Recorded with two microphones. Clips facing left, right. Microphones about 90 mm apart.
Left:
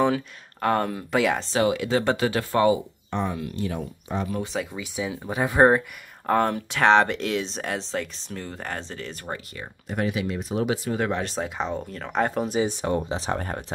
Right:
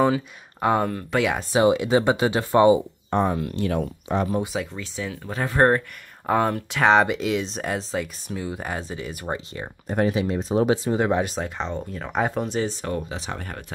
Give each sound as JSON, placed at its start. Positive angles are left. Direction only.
{"t": 0.0, "sound": "speech", "side_deg": -10}
{"t": 0.8, "sound": "speech", "side_deg": 0}
{"t": 1.4, "sound": "speech", "side_deg": -20}
{"t": 3.1, "sound": "speech", "side_deg": -45}
{"t": 3.5, "sound": "speech", "side_deg": -70}
{"t": 4.5, "sound": "speech", "side_deg": -5}
{"t": 4.9, "sound": "speech", "side_deg": 15}
{"t": 6.2, "sound": "speech", "side_deg": 0}
{"t": 9.8, "sound": "speech", "side_deg": -35}
{"t": 11.3, "sound": "speech", "side_deg": 5}
{"t": 12.4, "sound": "speech", "side_deg": 5}
{"t": 12.7, "sound": "speech", "side_deg": 20}
{"t": 13.1, "sound": "speech", "side_deg": 35}